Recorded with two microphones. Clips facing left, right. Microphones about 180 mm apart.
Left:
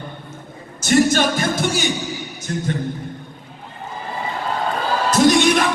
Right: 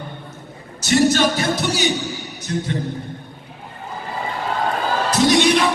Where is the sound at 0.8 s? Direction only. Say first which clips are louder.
Even; 50° left (ahead or behind).